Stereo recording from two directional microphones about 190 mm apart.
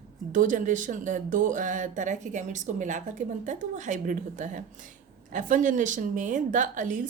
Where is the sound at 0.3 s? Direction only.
45° right (ahead or behind).